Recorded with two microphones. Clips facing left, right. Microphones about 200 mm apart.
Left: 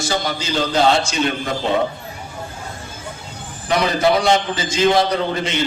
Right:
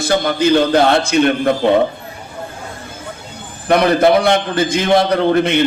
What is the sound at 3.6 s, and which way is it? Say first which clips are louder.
A man's voice: right 5 dB; 55° right (ahead or behind).